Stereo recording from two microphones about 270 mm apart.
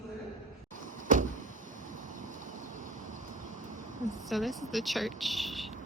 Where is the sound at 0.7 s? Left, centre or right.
Right.